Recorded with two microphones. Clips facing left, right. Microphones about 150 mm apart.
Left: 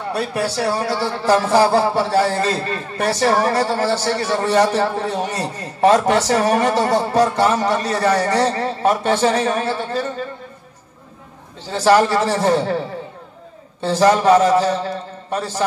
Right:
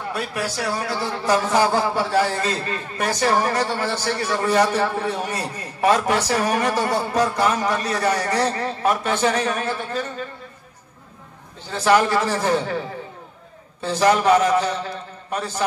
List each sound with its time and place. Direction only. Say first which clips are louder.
0.1 s speech: left 6 dB; 35° left (ahead or behind)
11.7 s speech: left 3 dB; 35° left (ahead or behind)